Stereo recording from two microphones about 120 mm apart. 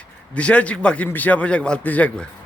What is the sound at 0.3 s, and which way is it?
A man's voice, 10° left (ahead or behind).